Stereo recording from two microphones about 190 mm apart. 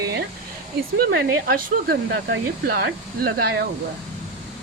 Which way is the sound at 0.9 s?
50° right (ahead or behind).